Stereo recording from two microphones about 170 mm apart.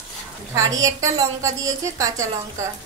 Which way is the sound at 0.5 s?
20° right (ahead or behind).